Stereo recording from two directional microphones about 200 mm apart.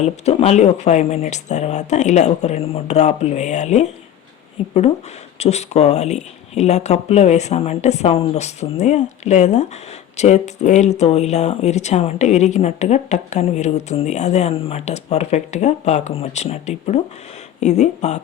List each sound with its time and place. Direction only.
0.0 s speech: 30° left (ahead or behind)